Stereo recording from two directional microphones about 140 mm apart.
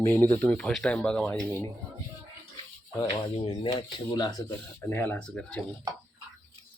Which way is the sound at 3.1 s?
35° left (ahead or behind).